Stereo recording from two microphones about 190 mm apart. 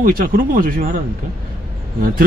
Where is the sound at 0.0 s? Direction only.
45° right (ahead or behind).